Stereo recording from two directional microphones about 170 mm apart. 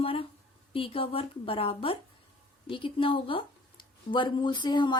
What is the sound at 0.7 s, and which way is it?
A woman's voice, 35° left (ahead or behind).